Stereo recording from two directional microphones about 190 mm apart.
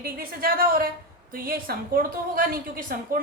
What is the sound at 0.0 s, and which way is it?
A woman's voice, 50° right (ahead or behind).